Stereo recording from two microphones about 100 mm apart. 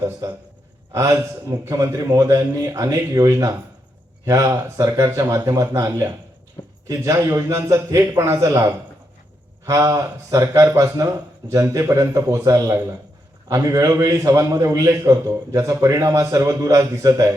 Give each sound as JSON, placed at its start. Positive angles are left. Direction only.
{"t": 0.0, "sound": "a man's voice", "side_deg": -30}